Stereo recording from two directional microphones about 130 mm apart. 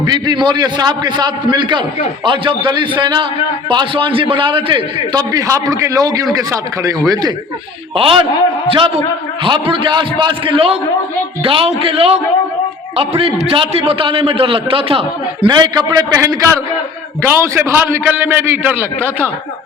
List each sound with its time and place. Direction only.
0.0 s a man's voice: 35° right (ahead or behind)
7.9 s a man's voice: 45° right (ahead or behind)
9.4 s a man's voice: 40° right (ahead or behind)
15.5 s a man's voice: 30° right (ahead or behind); by 18.9 s 15° right (ahead or behind)